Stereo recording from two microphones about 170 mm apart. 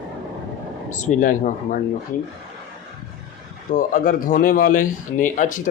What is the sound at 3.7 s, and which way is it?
Speech, 55° left (ahead or behind).